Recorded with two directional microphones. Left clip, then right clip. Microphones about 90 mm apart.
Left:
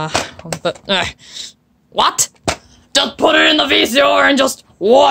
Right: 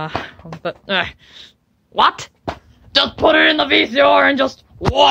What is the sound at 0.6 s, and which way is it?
Speech, 60° left (ahead or behind).